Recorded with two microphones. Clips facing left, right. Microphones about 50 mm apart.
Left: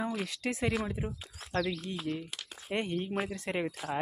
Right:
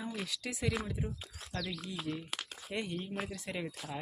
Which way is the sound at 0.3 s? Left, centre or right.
Left.